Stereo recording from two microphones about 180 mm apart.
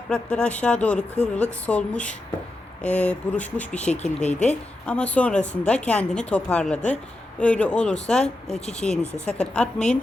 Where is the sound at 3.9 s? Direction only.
40° left (ahead or behind).